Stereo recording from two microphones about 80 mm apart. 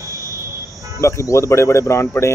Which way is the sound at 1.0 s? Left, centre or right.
Left.